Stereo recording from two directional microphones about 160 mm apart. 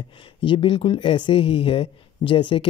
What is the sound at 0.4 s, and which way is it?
Speech, 30° left (ahead or behind).